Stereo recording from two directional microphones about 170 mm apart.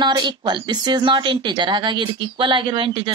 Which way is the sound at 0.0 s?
25° right (ahead or behind).